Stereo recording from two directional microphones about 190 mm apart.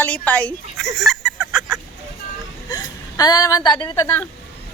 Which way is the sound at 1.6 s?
15° right (ahead or behind).